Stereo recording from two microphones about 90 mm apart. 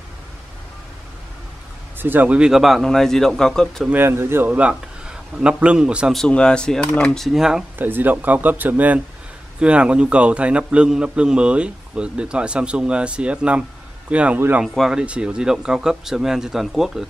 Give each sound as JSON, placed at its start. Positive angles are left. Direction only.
{"t": 2.0, "sound": "speech", "side_deg": -20}
{"t": 3.9, "sound": "a man's voice", "side_deg": -25}
{"t": 6.1, "sound": "speech", "side_deg": 10}
{"t": 7.2, "sound": "speech", "side_deg": -5}
{"t": 7.8, "sound": "a man's voice", "side_deg": -20}